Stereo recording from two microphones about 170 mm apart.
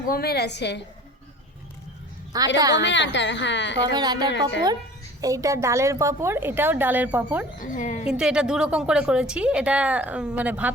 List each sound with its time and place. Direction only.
0.1 s a woman's voice: 65° left (ahead or behind); by 0.8 s 90° left
2.6 s speech: 20° right (ahead or behind)
2.8 s a woman's voice: 90° left
3.9 s speech: 25° right (ahead or behind)
4.3 s a woman's voice: 90° left
5.2 s a woman's voice: 20° right (ahead or behind)
7.6 s a woman's voice: 50° left (ahead or behind)
8.0 s a woman's voice: 5° right (ahead or behind)